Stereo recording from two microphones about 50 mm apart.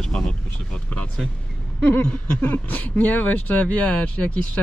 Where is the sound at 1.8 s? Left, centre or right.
Left.